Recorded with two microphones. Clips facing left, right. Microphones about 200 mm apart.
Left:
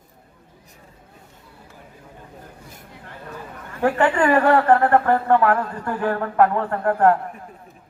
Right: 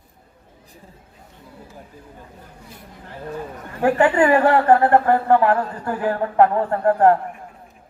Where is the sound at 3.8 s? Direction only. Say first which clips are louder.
Right 2 dB; 25° right (ahead or behind).